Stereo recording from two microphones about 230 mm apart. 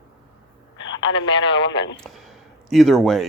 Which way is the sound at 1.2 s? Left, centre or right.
Left.